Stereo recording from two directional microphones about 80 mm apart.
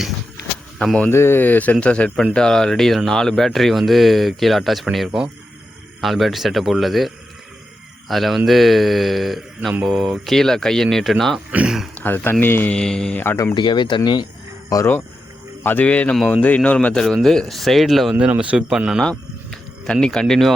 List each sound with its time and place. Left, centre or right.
1.1 s speech: left; by 11.3 s centre
11.5 s speech: centre
11.9 s speech: left
12.7 s speech: centre
13.5 s speech: left
14.7 s speech: left
15.6 s speech: left; by 18.2 s centre
18.3 s speech: centre
19.0 s speech: centre